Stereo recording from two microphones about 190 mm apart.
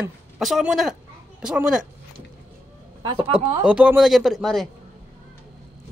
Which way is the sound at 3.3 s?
5° right (ahead or behind).